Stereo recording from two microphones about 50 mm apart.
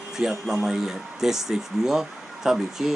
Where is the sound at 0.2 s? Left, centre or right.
Centre.